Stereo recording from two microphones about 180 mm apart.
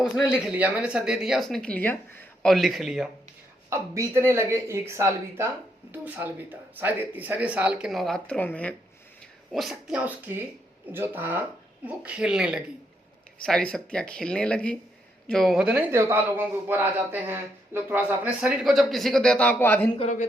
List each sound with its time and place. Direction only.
0.0 s speech: 5° right (ahead or behind)
2.5 s speech: centre (ahead or behind)
3.7 s a man's voice: 15° right (ahead or behind)
18.6 s speech: centre (ahead or behind)
20.0 s a woman's voice: 40° left (ahead or behind)